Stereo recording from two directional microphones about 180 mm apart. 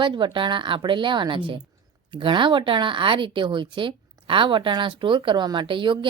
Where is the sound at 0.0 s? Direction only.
25° right (ahead or behind).